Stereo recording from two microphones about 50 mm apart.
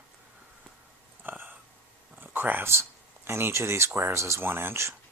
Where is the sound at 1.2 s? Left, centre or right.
Right.